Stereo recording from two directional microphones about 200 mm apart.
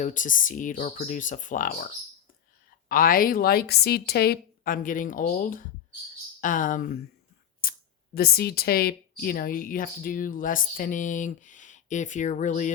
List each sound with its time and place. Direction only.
0.0 s a woman's voice: 40° left (ahead or behind)